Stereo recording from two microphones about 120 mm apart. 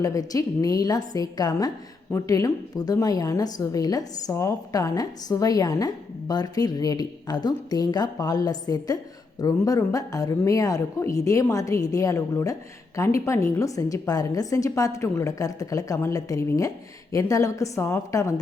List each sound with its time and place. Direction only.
0.0 s a woman's voice: 30° left (ahead or behind)